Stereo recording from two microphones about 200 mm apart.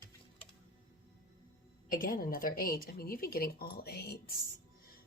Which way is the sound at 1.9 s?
45° left (ahead or behind).